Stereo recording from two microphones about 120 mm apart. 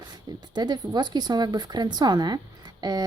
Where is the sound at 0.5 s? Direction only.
35° right (ahead or behind).